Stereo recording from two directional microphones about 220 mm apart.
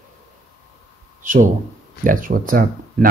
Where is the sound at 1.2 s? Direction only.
35° right (ahead or behind).